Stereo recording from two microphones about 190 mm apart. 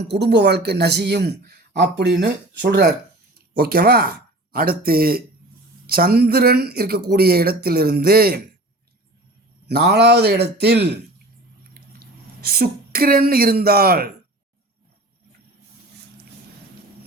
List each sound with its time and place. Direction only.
0.0 s speech: 60° right (ahead or behind)
9.6 s speech: 60° right (ahead or behind)